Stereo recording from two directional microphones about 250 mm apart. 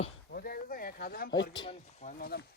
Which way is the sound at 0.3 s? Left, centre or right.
Left.